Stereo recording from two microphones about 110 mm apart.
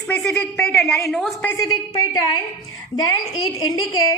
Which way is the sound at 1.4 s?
15° left (ahead or behind).